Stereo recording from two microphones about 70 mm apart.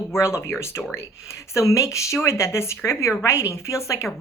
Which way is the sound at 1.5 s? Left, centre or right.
Left.